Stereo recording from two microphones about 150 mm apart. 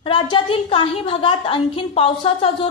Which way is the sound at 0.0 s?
35° left (ahead or behind).